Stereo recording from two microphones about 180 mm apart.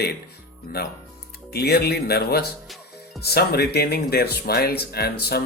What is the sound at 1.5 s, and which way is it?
Speech, 60° left (ahead or behind).